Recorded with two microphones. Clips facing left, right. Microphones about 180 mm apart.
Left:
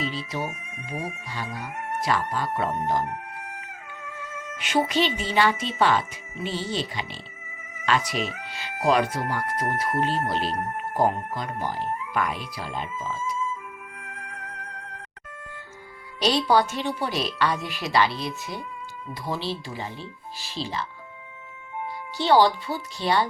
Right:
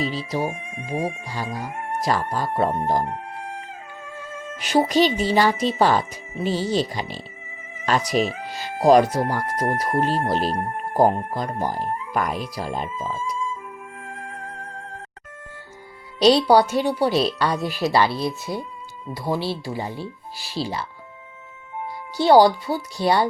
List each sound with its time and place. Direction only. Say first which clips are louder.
0.0 s speech: right 5 dB; 40° right (ahead or behind)
14.2 s music: right 4 dB; 30° right (ahead or behind)
16.2 s speech: right 6 dB; 35° right (ahead or behind)
22.2 s speech: right 5 dB; 40° right (ahead or behind)